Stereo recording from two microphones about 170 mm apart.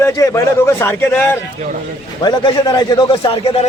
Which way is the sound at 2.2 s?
25° left (ahead or behind).